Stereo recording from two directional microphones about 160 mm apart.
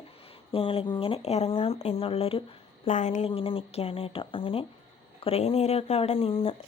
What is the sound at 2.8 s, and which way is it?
A woman's voice, 50° left (ahead or behind).